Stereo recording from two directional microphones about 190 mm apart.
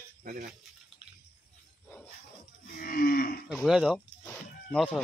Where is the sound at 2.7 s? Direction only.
50° left (ahead or behind).